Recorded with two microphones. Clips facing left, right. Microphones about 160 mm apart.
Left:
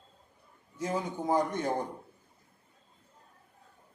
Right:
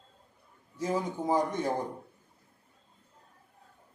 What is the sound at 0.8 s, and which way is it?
Speech, 5° right (ahead or behind).